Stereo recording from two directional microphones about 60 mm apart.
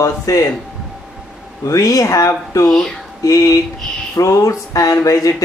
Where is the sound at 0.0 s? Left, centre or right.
Left.